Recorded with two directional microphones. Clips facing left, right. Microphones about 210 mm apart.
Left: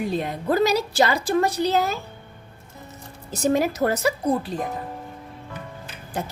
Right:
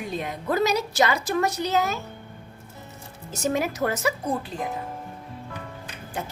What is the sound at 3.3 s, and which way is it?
Speech, 35° left (ahead or behind).